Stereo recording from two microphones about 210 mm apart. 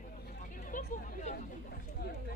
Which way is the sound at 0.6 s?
40° left (ahead or behind).